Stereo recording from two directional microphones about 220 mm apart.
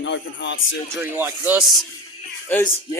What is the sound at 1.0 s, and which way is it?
Speech, 10° right (ahead or behind).